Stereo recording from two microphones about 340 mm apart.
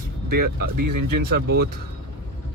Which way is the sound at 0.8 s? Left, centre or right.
Right.